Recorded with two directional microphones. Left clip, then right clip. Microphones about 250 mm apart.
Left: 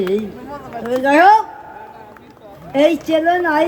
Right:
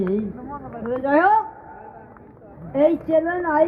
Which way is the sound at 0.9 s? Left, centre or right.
Left.